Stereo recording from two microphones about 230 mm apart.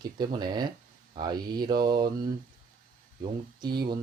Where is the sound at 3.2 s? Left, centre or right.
Centre.